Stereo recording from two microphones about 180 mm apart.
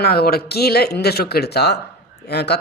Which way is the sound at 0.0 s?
60° left (ahead or behind).